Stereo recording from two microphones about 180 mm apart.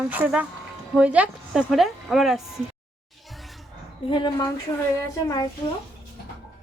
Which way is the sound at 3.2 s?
Centre (ahead or behind).